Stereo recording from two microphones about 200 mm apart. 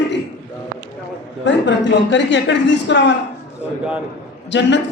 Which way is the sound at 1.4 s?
65° left (ahead or behind).